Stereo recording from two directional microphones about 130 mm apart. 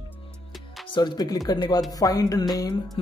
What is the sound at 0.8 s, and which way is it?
Speech, 35° left (ahead or behind).